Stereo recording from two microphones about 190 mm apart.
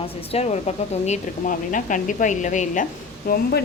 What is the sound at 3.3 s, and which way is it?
Speech, 50° left (ahead or behind).